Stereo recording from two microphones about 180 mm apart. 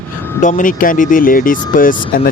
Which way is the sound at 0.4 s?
45° left (ahead or behind).